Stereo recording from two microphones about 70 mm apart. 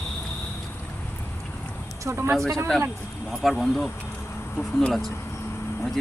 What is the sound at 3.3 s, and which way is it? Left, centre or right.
Speech, centre.